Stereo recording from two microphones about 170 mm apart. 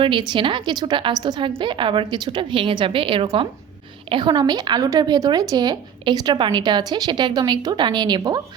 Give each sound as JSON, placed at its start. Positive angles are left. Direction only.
{"t": 0.0, "sound": "a woman's voice", "side_deg": -30}